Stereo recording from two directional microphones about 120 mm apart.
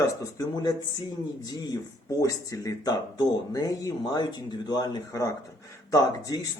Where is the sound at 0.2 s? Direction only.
25° left (ahead or behind).